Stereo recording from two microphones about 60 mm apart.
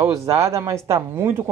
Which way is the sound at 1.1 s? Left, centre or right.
Right.